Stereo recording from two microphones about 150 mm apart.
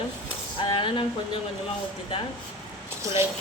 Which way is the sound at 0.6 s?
35° left (ahead or behind).